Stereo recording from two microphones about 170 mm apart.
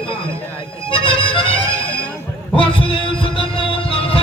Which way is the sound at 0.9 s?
30° left (ahead or behind).